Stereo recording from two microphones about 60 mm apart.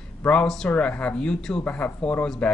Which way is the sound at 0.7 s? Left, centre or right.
Left.